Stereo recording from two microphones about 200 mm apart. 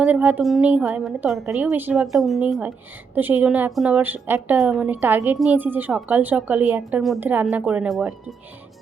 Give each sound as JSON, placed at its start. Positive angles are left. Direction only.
{"t": 0.0, "sound": "a woman's voice", "side_deg": -5}